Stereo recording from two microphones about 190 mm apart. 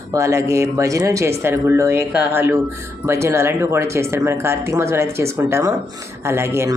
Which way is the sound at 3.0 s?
15° right (ahead or behind).